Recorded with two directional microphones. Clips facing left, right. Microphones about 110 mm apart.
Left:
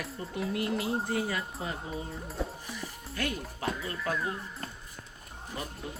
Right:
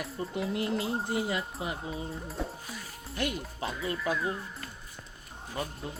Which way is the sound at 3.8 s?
Centre (ahead or behind).